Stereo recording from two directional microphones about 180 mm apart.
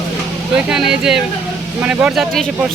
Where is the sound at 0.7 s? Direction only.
5° right (ahead or behind).